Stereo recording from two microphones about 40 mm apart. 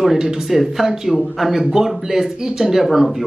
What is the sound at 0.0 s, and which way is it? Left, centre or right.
A woman's voice, centre.